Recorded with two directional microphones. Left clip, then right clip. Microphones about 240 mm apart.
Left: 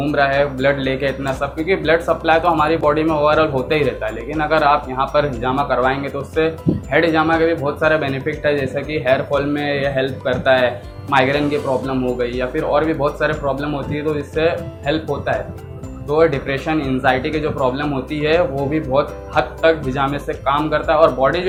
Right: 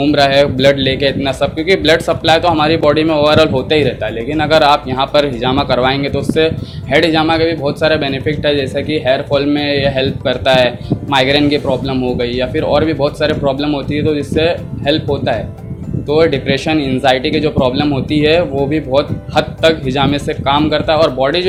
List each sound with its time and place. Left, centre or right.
0.0 s speech: right